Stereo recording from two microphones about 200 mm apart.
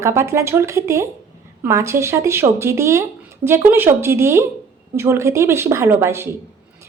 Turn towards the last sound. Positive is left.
turn(degrees=-15)  # may be behind; listen again after turning